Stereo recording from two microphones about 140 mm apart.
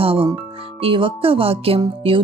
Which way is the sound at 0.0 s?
40° right (ahead or behind).